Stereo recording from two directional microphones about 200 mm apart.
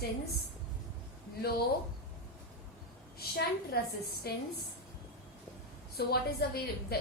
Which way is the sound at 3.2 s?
50° left (ahead or behind).